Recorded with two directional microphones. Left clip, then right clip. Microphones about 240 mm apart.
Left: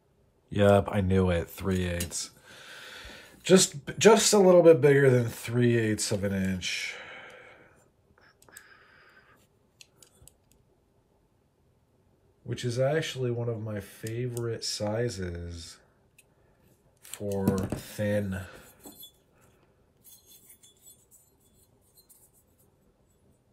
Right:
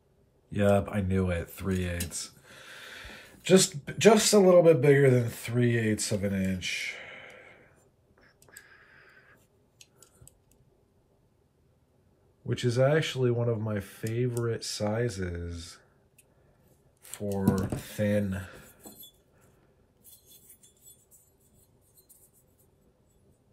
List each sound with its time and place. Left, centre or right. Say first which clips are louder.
0.5 s speech: left 3 dB; centre
2.2 s a sound: left 1 dB; centre
4.0 s speech: left 1 dB; centre
8.5 s a sound: even; centre
12.4 s speech: right 3 dB; centre
17.1 s speech: left 1 dB; centre